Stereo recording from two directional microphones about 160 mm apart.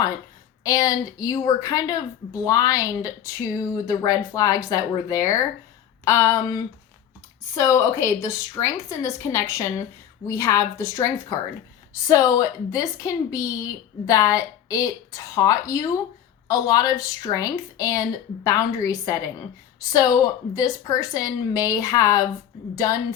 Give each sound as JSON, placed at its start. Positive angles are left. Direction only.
{"t": 0.6, "sound": "a woman's voice", "side_deg": 20}
{"t": 12.0, "sound": "a woman's voice", "side_deg": 20}